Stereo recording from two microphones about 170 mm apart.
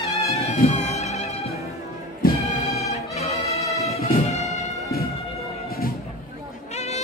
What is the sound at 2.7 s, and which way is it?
Music, 40° left (ahead or behind).